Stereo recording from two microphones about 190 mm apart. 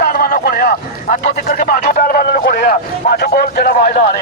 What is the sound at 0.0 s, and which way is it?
Speech, 50° left (ahead or behind).